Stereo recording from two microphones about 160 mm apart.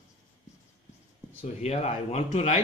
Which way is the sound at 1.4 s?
40° left (ahead or behind).